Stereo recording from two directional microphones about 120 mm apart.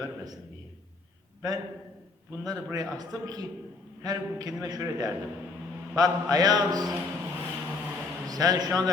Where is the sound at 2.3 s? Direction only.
35° right (ahead or behind).